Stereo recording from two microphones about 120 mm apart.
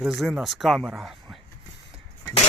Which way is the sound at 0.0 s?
Centre (ahead or behind).